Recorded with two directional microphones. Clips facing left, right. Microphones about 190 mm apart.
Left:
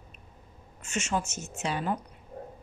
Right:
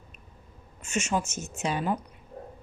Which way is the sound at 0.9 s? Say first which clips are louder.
Right 2 dB; 15° right (ahead or behind).